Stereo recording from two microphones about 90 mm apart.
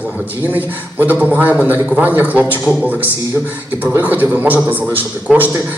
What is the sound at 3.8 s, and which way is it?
A man's voice, 20° right (ahead or behind).